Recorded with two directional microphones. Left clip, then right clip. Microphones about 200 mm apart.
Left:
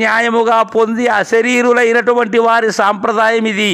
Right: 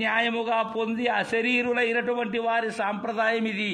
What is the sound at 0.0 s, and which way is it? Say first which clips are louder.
A man's voice: left 13 dB; 40° left (ahead or behind).